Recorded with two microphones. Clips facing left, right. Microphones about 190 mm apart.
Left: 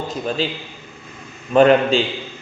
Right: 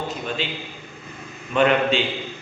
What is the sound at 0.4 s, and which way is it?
A man's voice, 35° left (ahead or behind).